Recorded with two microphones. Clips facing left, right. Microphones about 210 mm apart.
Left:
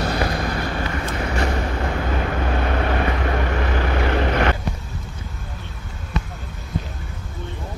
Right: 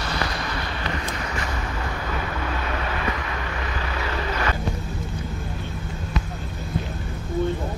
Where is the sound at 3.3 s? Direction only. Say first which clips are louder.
Left 8 dB; 55° left (ahead or behind).